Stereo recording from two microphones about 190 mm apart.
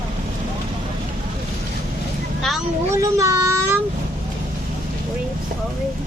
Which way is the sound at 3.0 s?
15° right (ahead or behind).